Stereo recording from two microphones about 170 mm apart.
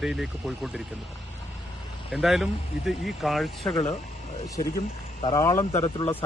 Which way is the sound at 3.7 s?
30° left (ahead or behind).